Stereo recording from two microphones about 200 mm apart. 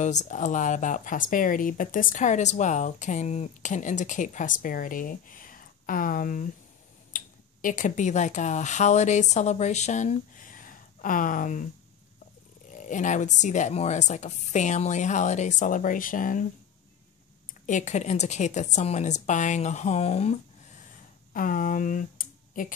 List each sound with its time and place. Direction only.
0.0 s speech: 35° left (ahead or behind)
12.7 s speech: 40° left (ahead or behind)
17.6 s speech: 40° left (ahead or behind)